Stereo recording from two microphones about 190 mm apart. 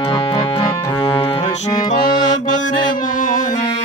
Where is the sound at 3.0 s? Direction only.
45° left (ahead or behind).